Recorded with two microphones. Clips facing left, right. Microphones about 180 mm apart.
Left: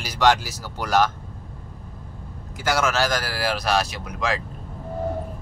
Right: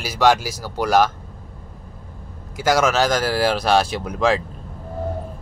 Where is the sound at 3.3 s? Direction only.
30° right (ahead or behind).